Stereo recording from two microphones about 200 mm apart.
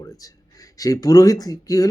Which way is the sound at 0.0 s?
15° left (ahead or behind).